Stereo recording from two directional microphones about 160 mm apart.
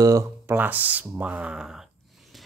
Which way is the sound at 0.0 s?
20° right (ahead or behind).